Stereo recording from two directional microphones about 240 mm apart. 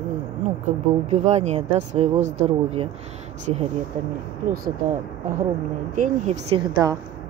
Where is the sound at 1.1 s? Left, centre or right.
Right.